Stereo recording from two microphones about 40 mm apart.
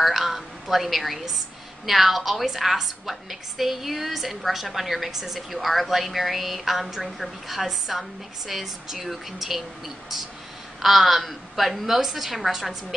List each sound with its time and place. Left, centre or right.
0.0 s a woman's voice: centre
10.8 s a woman's voice: centre